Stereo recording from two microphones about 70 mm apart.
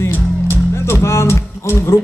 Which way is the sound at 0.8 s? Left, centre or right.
Left.